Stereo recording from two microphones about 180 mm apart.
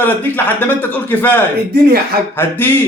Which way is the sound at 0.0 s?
10° left (ahead or behind).